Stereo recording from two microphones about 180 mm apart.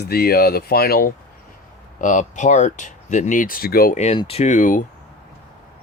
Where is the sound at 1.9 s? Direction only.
45° left (ahead or behind).